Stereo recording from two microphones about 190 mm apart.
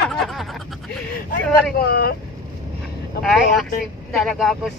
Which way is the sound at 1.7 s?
55° left (ahead or behind).